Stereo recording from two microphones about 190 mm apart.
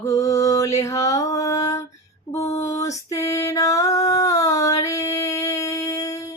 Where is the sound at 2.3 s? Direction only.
15° left (ahead or behind).